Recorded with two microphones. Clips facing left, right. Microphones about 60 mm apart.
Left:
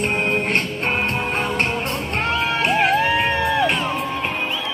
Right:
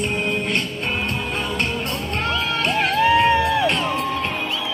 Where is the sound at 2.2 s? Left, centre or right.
Left.